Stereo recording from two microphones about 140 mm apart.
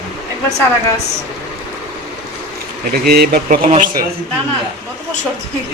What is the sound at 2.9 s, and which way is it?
Speech, 90° right.